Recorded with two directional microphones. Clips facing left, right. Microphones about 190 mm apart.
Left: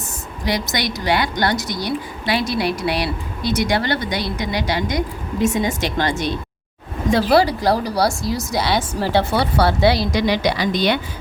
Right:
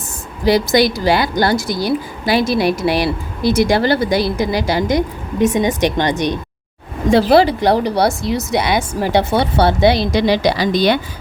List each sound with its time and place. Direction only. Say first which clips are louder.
0.4 s speech: right 10 dB; 30° right (ahead or behind)